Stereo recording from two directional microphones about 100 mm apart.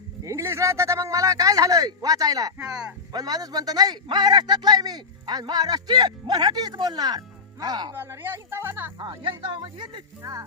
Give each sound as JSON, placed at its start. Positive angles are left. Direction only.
{"t": 0.3, "sound": "a sound", "side_deg": -30}
{"t": 2.6, "sound": "speech", "side_deg": -10}
{"t": 3.1, "sound": "a man's voice", "side_deg": -40}
{"t": 7.9, "sound": "speech", "side_deg": -25}
{"t": 9.0, "sound": "speech", "side_deg": -50}
{"t": 10.2, "sound": "music", "side_deg": -35}